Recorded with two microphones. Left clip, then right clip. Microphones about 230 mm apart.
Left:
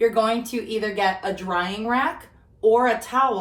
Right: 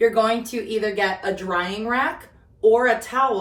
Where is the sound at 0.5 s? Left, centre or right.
Left.